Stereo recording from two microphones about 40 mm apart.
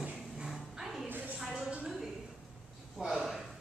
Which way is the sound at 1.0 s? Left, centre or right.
Right.